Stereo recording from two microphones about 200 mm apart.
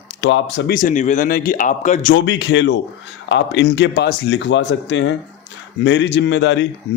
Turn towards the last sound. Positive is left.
turn(degrees=65)  # may be behind; listen again after turning